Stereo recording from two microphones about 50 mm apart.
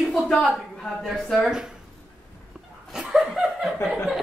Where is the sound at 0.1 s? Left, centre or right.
Centre.